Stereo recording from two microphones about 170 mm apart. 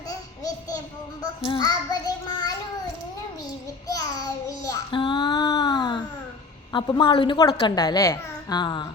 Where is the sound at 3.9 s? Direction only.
25° left (ahead or behind).